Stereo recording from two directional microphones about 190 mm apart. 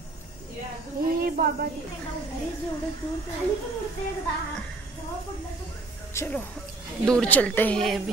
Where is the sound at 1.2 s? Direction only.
50° right (ahead or behind).